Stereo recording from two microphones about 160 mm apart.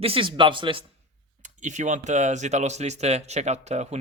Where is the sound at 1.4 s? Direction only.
50° right (ahead or behind).